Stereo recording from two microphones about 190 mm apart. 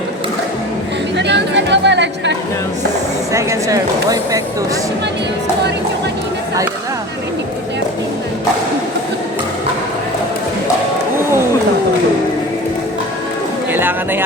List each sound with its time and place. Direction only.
1.1 s chatter: 65° right (ahead or behind)
3.3 s speech: 15° right (ahead or behind)
13.7 s speech: 10° right (ahead or behind)